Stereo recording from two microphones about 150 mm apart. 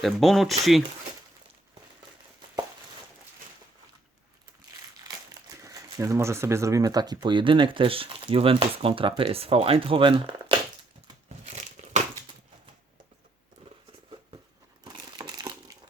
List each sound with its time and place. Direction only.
0.0 s speech: centre (ahead or behind)
5.5 s speech: 20° right (ahead or behind)
11.5 s crushing: 50° right (ahead or behind)
14.8 s crumpling: 25° right (ahead or behind)